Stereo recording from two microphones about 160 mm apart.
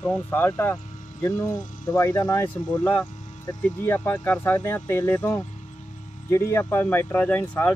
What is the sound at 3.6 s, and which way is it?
Speech, 10° left (ahead or behind).